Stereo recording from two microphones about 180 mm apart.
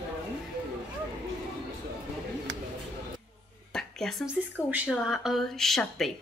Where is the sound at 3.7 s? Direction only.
Centre (ahead or behind).